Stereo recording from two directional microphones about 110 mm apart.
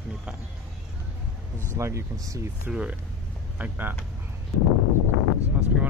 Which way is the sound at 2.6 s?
10° right (ahead or behind).